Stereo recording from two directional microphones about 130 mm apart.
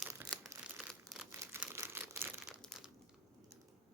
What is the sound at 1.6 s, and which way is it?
Crumpling, 20° right (ahead or behind).